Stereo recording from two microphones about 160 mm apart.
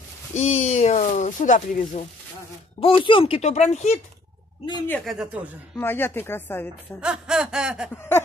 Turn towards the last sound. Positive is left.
turn(degrees=-5)  # may be behind; listen again after turning